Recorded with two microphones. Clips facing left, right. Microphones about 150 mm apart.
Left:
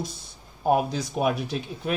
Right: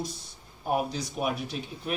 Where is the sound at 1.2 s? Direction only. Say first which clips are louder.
Left 6 dB; 90° left.